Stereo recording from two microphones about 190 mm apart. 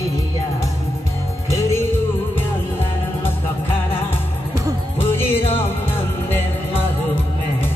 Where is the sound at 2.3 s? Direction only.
10° left (ahead or behind).